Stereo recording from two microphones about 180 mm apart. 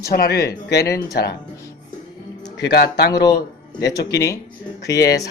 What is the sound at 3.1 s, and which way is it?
Speech, 20° left (ahead or behind).